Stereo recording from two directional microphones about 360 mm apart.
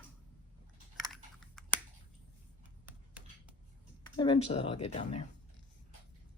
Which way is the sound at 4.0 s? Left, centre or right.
Centre.